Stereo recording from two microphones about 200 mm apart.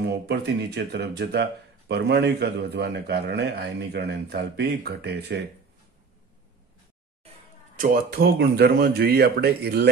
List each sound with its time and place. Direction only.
0.0 s speech: 55° right (ahead or behind)
7.7 s speech: 45° right (ahead or behind)